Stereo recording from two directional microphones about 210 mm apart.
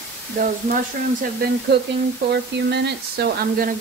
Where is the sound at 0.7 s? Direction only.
35° right (ahead or behind).